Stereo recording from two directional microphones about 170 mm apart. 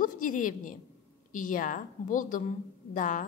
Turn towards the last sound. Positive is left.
turn(degrees=50)  # may be behind; listen again after turning